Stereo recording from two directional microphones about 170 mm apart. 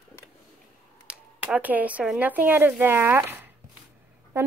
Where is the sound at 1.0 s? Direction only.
5° right (ahead or behind).